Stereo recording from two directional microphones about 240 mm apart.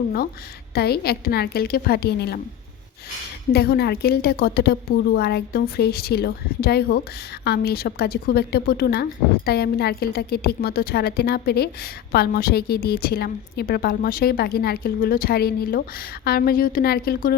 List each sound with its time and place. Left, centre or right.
0.7 s a woman's voice: left
3.5 s a woman's voice: left